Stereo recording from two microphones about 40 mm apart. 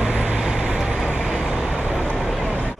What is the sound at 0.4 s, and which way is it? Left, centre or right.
Vehicle, centre.